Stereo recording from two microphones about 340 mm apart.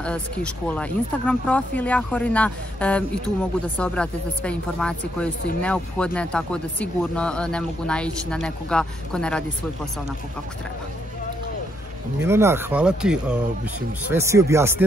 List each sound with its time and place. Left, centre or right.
0.0 s speech: centre
12.2 s speech: centre